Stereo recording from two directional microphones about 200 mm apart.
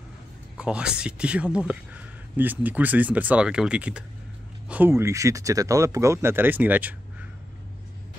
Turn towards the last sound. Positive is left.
turn(degrees=-10)  # may be behind; listen again after turning